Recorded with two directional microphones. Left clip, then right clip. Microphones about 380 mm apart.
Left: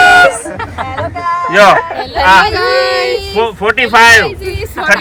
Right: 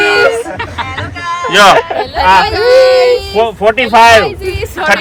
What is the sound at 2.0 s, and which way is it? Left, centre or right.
Speech, centre.